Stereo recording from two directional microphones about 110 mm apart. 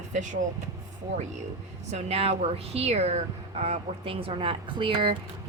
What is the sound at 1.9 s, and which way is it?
Speech, 70° right (ahead or behind).